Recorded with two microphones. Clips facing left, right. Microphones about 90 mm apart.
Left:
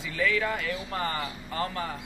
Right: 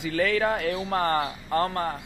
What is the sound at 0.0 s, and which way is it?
Speech, 65° right (ahead or behind).